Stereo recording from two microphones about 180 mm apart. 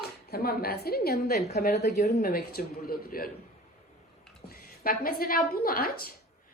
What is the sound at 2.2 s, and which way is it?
Speech, 55° left (ahead or behind).